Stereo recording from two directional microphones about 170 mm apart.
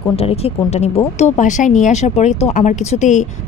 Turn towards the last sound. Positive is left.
turn(degrees=45)  # may be behind; listen again after turning